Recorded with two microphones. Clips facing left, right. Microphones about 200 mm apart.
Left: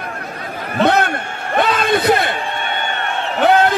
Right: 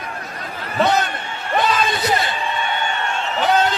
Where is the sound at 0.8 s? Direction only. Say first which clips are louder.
Left 3 dB; 60° left (ahead or behind).